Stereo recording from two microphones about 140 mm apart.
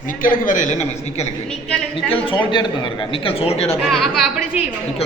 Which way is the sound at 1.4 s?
5° left (ahead or behind).